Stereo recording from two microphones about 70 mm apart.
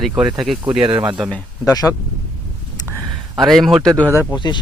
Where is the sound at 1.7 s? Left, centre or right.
Left.